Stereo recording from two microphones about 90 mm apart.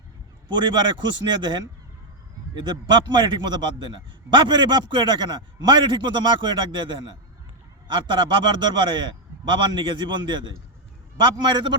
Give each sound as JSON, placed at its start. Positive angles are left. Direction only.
{"t": 0.4, "sound": "a man's voice", "side_deg": -55}